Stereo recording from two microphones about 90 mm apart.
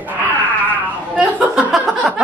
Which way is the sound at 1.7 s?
5° right (ahead or behind).